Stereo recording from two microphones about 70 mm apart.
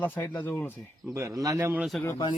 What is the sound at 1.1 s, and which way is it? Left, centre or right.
Speech, right.